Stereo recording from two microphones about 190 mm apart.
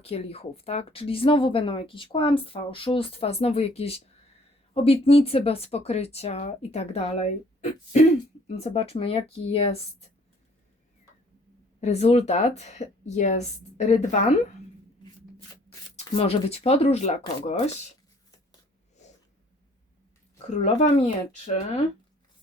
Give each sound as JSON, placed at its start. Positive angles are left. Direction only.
{"t": 0.0, "sound": "a woman's voice", "side_deg": 30}
{"t": 11.8, "sound": "speech", "side_deg": 35}
{"t": 16.0, "sound": "speech", "side_deg": 30}
{"t": 20.5, "sound": "speech", "side_deg": 35}